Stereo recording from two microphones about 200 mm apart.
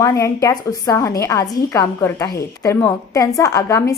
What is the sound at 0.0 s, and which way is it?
A woman's voice, 15° left (ahead or behind).